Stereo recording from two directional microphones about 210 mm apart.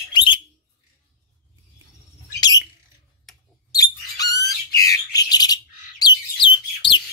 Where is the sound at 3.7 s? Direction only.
15° left (ahead or behind).